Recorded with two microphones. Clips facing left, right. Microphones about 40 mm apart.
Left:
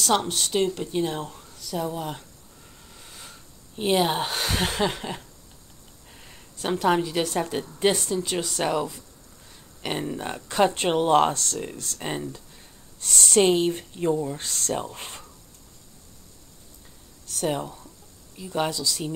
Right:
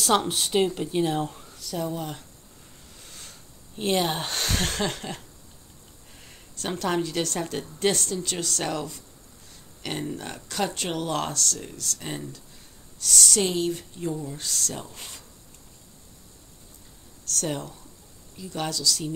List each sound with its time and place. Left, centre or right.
0.0 s speech: centre
3.0 s a sound: centre
6.2 s a woman's voice: centre; by 15.2 s left
17.3 s a woman's voice: centre